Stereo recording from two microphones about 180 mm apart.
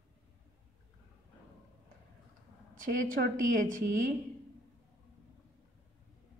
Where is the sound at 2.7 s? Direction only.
50° right (ahead or behind).